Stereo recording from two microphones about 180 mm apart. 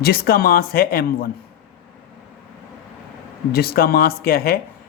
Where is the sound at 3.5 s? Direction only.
60° left (ahead or behind).